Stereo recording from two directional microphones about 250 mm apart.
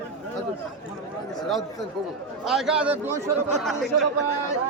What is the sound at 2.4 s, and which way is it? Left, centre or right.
Speech, centre.